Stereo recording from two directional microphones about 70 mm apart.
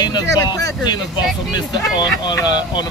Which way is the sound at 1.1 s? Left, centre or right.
Left.